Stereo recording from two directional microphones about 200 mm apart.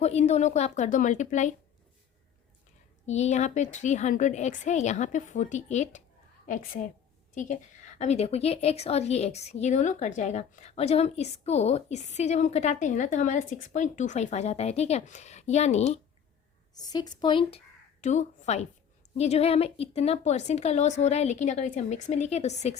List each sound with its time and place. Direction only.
0.0 s a woman's voice: 30° left (ahead or behind)
3.1 s a woman's voice: 35° left (ahead or behind)
16.7 s a woman's voice: 20° left (ahead or behind)
18.0 s a woman's voice: 35° left (ahead or behind)